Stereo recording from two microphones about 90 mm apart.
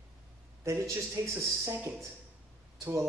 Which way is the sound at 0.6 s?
30° right (ahead or behind).